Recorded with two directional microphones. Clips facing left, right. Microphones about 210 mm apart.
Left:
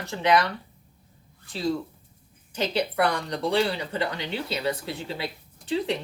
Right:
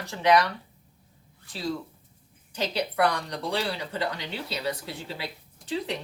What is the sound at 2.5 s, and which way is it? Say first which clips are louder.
Speech: left 3 dB; 25° left (ahead or behind).